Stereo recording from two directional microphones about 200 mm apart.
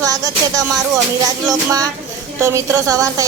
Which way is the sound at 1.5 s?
20° right (ahead or behind).